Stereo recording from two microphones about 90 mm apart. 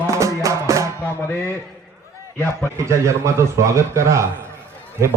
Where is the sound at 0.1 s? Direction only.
35° right (ahead or behind).